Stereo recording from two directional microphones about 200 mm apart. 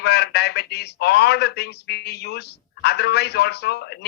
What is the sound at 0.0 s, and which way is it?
Speech, 55° left (ahead or behind).